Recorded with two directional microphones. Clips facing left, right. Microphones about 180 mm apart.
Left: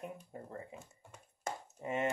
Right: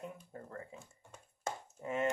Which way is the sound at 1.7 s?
20° left (ahead or behind).